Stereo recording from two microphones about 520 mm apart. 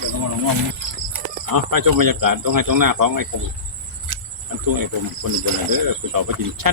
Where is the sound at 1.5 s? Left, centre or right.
Right.